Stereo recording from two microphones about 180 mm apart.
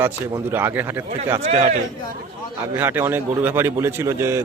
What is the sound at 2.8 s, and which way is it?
Speech, 10° right (ahead or behind).